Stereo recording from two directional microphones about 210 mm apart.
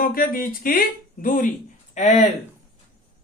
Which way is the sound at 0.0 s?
45° left (ahead or behind).